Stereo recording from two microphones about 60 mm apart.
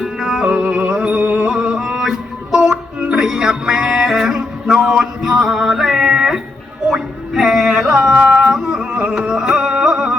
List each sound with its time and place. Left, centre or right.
0.0 s music: centre
0.5 s music: centre
8.1 s music: centre